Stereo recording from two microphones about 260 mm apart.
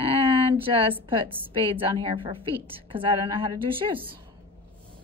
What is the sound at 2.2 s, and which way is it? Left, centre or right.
A woman's voice, right.